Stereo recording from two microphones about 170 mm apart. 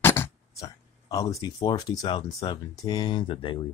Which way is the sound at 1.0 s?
20° left (ahead or behind).